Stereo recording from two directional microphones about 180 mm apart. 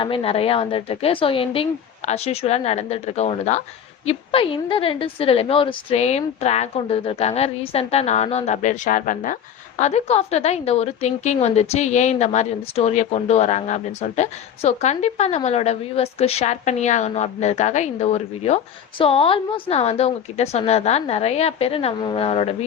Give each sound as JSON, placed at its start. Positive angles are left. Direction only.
{"t": 0.0, "sound": "a woman's voice", "side_deg": 30}